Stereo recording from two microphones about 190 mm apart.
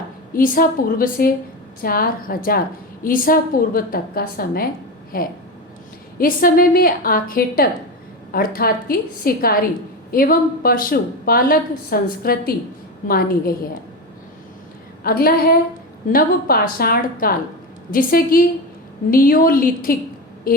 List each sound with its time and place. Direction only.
0.3 s a woman's voice: 45° left (ahead or behind)
15.0 s a woman's voice: 50° left (ahead or behind)